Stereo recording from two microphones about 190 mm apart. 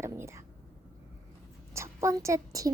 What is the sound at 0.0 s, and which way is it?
Whispering, 15° right (ahead or behind).